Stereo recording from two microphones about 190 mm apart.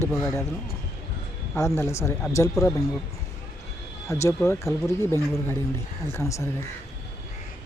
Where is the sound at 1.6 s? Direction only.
15° left (ahead or behind).